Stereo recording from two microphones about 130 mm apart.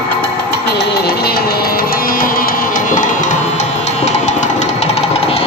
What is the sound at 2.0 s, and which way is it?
Music, 90° left.